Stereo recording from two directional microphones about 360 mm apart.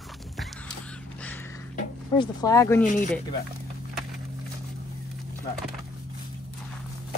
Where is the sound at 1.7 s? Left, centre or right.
Centre.